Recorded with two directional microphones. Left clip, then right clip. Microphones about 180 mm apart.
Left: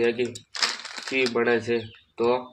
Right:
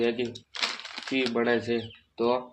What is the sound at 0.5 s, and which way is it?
Crumpling, 5° left (ahead or behind).